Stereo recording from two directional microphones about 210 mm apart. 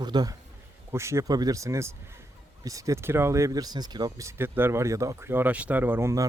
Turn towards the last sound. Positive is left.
turn(degrees=-15)  # may be behind; listen again after turning